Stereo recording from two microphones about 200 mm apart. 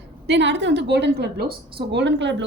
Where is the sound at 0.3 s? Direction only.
60° right (ahead or behind).